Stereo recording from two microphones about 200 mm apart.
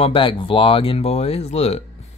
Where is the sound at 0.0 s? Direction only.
25° left (ahead or behind).